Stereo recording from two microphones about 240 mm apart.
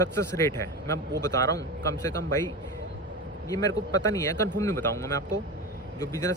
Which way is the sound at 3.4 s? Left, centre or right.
Centre.